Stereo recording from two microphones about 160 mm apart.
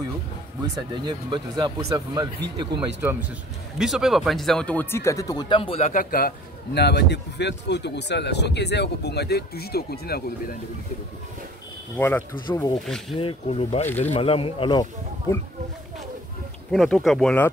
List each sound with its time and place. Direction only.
0.9 s speech: 30° right (ahead or behind)
3.0 s speech: 10° right (ahead or behind); by 6.0 s 45° left (ahead or behind)
6.1 s a man's voice: 80° left
12.0 s speech: 10° left (ahead or behind)
12.4 s speech: 25° left (ahead or behind)
16.7 s speech: centre (ahead or behind)